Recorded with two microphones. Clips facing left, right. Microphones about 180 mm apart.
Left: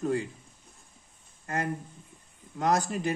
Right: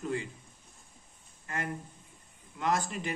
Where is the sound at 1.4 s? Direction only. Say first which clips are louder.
Left 5 dB; 40° left (ahead or behind).